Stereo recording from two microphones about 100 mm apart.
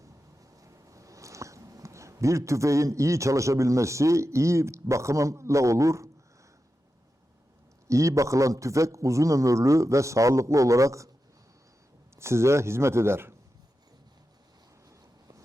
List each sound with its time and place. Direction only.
0.5 s speech: 35° right (ahead or behind)
7.9 s a man's voice: 30° right (ahead or behind)
12.1 s a man's voice: 25° right (ahead or behind)